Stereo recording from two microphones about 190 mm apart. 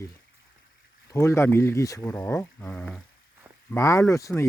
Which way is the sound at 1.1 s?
15° left (ahead or behind).